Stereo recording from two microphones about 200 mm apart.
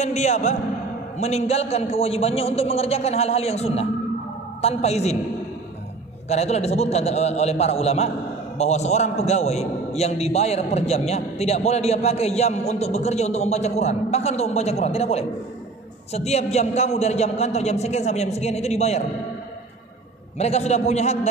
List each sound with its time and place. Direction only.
0.0 s a man's voice: 35° left (ahead or behind)
6.2 s a man's voice: 35° left (ahead or behind)
20.3 s a man's voice: 30° left (ahead or behind)